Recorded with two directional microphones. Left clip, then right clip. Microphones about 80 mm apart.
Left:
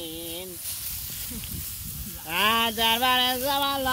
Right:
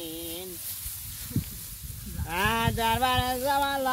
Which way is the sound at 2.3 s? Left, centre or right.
Right.